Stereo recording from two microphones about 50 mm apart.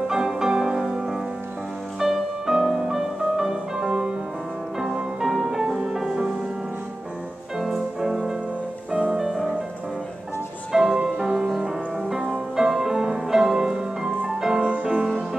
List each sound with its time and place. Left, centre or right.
0.1 s music: centre
7.5 s music: centre
8.9 s music: right
9.2 s music: centre
10.7 s music: centre
14.6 s music: right